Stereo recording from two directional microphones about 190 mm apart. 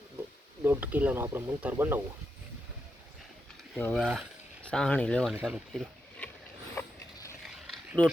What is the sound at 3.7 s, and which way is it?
Speech, 5° left (ahead or behind).